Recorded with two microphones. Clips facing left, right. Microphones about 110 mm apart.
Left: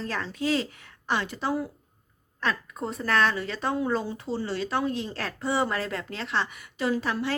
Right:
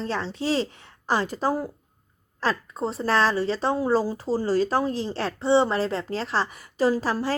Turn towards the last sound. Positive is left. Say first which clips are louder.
# right 3 dB
turn(degrees=-35)  # may be behind; listen again after turning